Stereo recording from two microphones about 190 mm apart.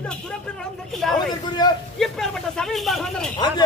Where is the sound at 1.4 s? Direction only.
20° left (ahead or behind).